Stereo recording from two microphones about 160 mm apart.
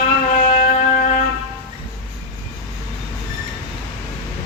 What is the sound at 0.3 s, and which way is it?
Music, 55° left (ahead or behind).